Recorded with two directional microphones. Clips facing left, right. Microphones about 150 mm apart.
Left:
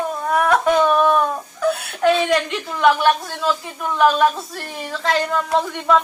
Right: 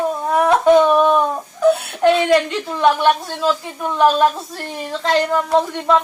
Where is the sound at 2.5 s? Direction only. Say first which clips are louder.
Right 1 dB; 20° right (ahead or behind).